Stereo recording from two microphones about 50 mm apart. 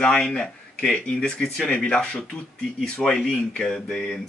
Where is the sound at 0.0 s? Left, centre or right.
Centre.